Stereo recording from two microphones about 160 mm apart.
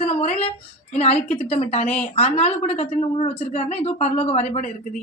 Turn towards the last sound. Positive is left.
turn(degrees=45)  # may be behind; listen again after turning